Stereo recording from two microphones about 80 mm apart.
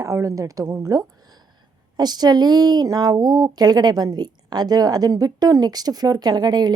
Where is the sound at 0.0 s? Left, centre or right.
Right.